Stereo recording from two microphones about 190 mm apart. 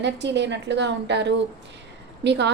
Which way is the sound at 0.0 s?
65° right (ahead or behind).